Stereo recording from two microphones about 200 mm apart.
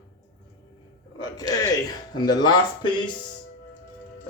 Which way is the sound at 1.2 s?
20° left (ahead or behind).